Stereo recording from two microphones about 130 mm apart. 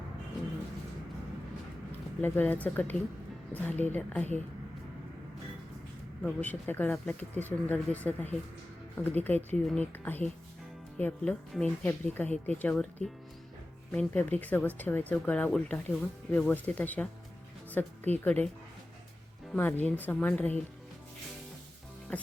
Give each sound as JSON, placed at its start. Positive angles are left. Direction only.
{"t": 2.2, "sound": "speech", "side_deg": 15}
{"t": 6.2, "sound": "a woman's voice", "side_deg": 10}
{"t": 19.5, "sound": "speech", "side_deg": 15}
{"t": 22.1, "sound": "speech", "side_deg": 10}